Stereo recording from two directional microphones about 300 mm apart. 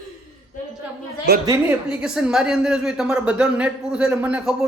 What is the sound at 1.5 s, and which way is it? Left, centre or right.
A woman's voice, centre.